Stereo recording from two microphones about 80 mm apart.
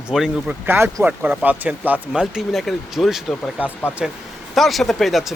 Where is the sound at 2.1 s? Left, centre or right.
Centre.